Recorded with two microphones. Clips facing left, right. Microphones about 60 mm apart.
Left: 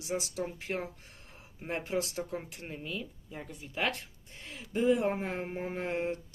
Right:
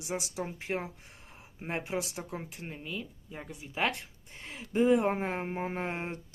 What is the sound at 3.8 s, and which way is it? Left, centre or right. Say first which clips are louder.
Speech: right 2 dB; right.